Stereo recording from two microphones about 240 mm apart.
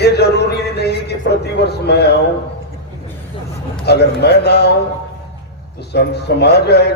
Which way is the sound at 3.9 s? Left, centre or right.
Left.